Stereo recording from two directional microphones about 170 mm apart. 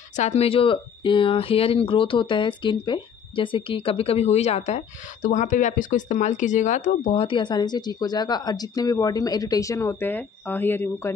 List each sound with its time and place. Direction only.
0.1 s speech: 40° left (ahead or behind); by 11.1 s 10° left (ahead or behind)